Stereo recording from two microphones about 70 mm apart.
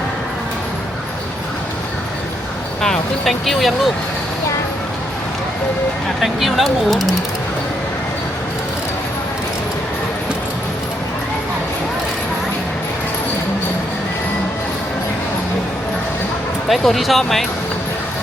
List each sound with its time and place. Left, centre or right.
2.8 s speech: centre
6.2 s speech: centre
16.6 s speech: centre